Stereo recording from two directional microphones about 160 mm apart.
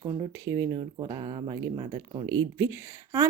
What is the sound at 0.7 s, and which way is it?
Speech, 30° right (ahead or behind).